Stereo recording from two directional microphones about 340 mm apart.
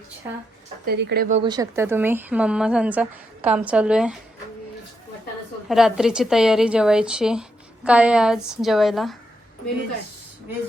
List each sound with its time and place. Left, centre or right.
0.2 s speech: centre
0.9 s speech: right
1.5 s speech: centre
5.6 s speech: centre